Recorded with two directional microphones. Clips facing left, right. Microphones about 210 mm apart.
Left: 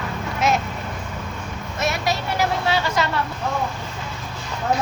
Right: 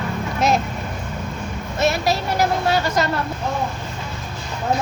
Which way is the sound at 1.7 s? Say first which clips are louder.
Right 4 dB; 30° right (ahead or behind).